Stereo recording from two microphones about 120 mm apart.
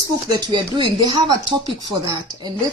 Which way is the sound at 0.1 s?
35° right (ahead or behind).